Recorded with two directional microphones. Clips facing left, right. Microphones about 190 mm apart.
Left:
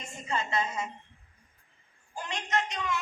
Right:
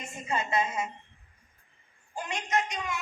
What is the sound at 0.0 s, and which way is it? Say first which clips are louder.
Speech: right 1 dB; 20° right (ahead or behind).